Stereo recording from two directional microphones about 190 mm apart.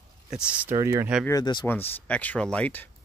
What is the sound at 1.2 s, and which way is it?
Speech, 20° left (ahead or behind).